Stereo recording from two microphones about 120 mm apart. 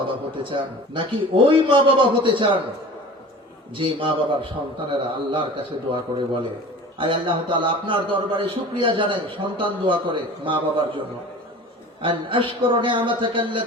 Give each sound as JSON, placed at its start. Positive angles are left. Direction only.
{"t": 0.4, "sound": "a man's voice", "side_deg": -45}
{"t": 3.8, "sound": "a man's voice", "side_deg": -45}
{"t": 12.0, "sound": "a man's voice", "side_deg": -45}